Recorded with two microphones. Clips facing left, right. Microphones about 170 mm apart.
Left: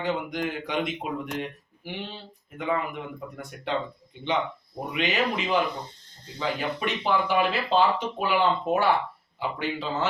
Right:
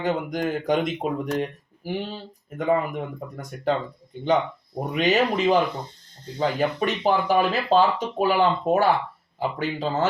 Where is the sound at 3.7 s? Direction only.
40° right (ahead or behind).